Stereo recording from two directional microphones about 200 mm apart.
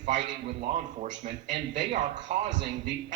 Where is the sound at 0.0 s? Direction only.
35° right (ahead or behind).